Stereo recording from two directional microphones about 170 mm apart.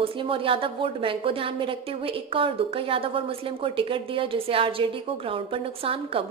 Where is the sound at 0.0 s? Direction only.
30° right (ahead or behind).